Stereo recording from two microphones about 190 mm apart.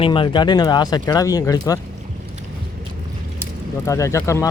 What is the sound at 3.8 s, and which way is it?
Speech, 15° left (ahead or behind).